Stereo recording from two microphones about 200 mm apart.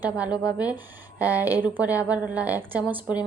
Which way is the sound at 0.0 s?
5° right (ahead or behind).